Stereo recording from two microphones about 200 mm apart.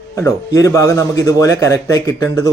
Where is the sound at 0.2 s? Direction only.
15° left (ahead or behind).